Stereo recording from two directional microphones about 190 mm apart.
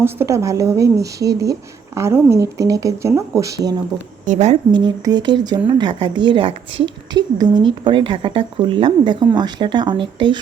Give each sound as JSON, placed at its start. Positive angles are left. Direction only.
{"t": 0.0, "sound": "speech", "side_deg": -15}
{"t": 4.3, "sound": "a woman's voice", "side_deg": -35}
{"t": 4.9, "sound": "a woman's voice", "side_deg": -20}